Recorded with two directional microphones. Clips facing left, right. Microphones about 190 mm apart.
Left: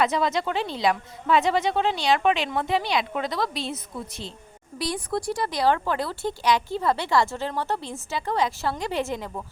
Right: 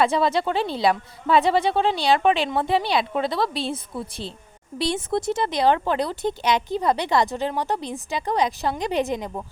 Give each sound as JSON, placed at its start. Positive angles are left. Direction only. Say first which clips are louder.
{"t": 0.0, "sound": "a woman's voice", "louder": "right 3 dB", "side_deg": -30}